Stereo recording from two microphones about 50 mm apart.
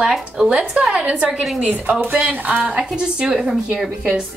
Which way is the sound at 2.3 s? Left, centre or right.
Right.